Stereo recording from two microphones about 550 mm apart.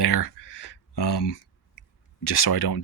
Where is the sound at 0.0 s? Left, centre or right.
Left.